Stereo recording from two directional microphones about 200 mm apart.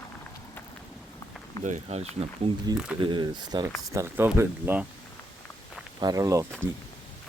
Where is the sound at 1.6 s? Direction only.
35° right (ahead or behind).